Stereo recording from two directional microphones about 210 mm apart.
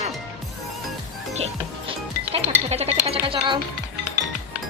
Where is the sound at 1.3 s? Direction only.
30° right (ahead or behind).